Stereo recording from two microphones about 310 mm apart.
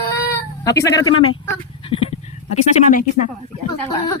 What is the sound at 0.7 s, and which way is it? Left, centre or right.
Speech, centre.